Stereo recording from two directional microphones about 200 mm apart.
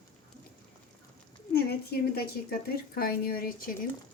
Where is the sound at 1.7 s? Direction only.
50° left (ahead or behind).